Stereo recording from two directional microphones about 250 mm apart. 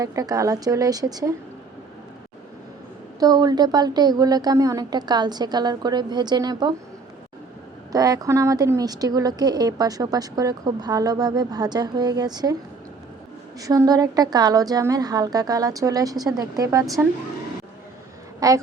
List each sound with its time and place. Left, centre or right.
0.0 s a woman's voice: centre
3.2 s a woman's voice: centre
7.9 s a woman's voice: centre
13.6 s a woman's voice: centre
18.3 s a woman's voice: centre